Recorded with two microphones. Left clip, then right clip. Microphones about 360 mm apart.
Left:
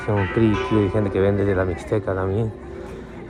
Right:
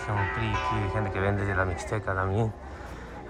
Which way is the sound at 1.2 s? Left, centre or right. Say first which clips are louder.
Left 8 dB; centre.